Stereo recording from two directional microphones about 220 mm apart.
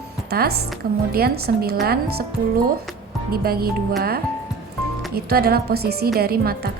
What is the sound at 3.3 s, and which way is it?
Speech, 45° right (ahead or behind).